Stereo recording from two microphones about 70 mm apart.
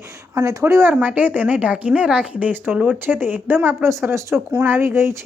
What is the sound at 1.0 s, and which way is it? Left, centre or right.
Speech, right.